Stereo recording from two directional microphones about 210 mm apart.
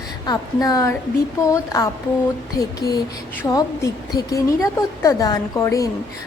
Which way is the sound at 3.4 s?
15° left (ahead or behind).